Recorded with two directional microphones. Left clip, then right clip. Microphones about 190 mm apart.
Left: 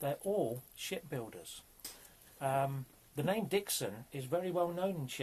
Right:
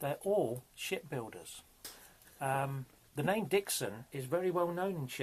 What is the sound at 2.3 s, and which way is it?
Speech, 10° right (ahead or behind).